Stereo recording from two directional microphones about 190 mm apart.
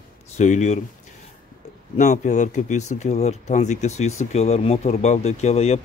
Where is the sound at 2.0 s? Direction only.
40° left (ahead or behind).